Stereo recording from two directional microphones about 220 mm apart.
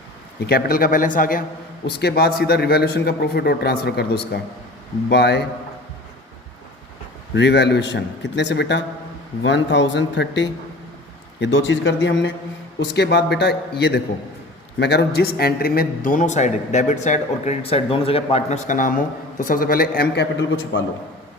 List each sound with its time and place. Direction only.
0.4 s a man's voice: 45° left (ahead or behind)
7.3 s a man's voice: 50° left (ahead or behind)